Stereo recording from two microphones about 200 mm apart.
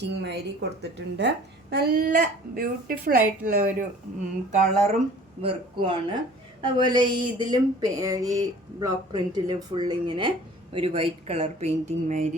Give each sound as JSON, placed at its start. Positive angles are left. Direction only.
{"t": 0.0, "sound": "a woman's voice", "side_deg": -60}